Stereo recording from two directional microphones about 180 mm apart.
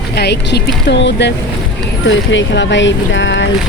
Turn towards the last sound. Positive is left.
turn(degrees=90)